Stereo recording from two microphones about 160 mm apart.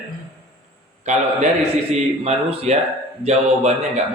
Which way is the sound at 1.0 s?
45° right (ahead or behind).